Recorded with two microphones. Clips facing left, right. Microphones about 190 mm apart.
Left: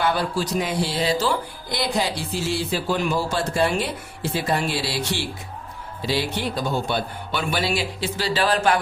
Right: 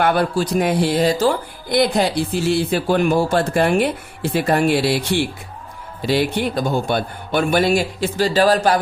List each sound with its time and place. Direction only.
0.0 s speech: 55° right (ahead or behind); by 8.8 s 40° right (ahead or behind)